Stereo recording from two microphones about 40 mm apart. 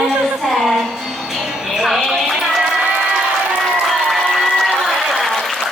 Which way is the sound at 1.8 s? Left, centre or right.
Centre.